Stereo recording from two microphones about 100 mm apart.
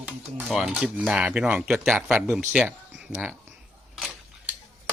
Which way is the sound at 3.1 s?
20° right (ahead or behind).